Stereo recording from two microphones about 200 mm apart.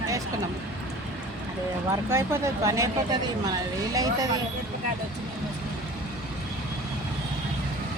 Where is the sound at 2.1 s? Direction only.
15° right (ahead or behind).